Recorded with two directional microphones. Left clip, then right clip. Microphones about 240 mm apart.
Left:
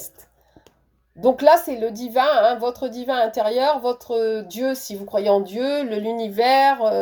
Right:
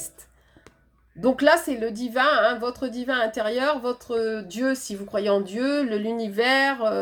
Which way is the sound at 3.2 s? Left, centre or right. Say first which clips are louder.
Left 6 dB; left.